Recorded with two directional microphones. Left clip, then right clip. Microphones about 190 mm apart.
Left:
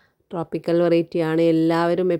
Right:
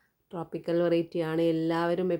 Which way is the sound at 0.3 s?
40° left (ahead or behind).